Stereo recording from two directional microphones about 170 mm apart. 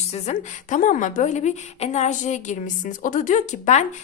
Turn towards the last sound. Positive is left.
turn(degrees=45)  # may be behind; listen again after turning